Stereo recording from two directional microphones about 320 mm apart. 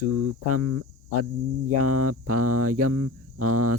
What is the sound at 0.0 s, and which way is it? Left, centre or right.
Speech, right.